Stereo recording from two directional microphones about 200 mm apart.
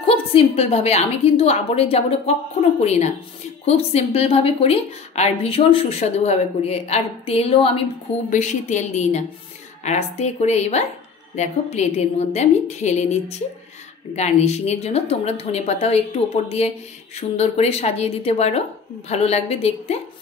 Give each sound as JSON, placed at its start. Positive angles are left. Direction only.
{"t": 0.0, "sound": "speech", "side_deg": 25}